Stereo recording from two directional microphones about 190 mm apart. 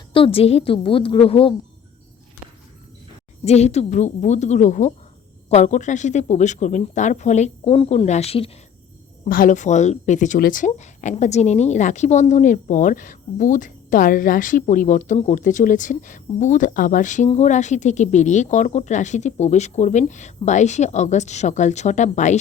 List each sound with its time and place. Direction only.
0.1 s a woman's voice: 30° left (ahead or behind)
3.4 s a woman's voice: 35° left (ahead or behind)
9.2 s a woman's voice: 45° left (ahead or behind)
10.7 s a woman's voice: 35° left (ahead or behind)